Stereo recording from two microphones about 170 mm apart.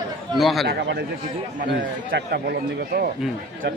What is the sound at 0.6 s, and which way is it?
A man's voice, 75° right (ahead or behind).